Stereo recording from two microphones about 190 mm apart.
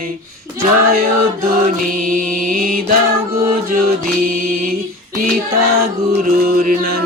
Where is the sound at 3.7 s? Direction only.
50° right (ahead or behind).